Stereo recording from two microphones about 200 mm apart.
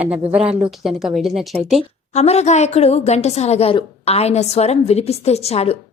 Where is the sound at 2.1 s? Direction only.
35° left (ahead or behind).